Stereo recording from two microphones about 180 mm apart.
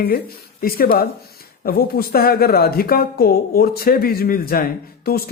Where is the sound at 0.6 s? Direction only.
55° left (ahead or behind).